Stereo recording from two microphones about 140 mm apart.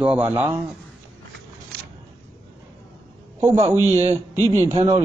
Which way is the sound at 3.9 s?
45° right (ahead or behind).